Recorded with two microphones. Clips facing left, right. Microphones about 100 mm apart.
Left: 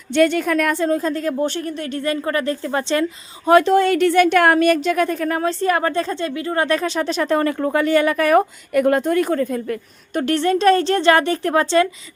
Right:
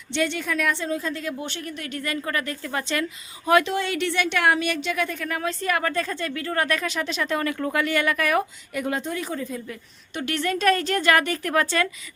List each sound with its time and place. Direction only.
0.1 s a woman's voice: 50° left (ahead or behind)
8.7 s a woman's voice: 55° left (ahead or behind); by 11.9 s 25° left (ahead or behind)